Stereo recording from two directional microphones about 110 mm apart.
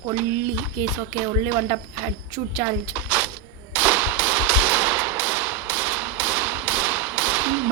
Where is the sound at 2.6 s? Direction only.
15° right (ahead or behind).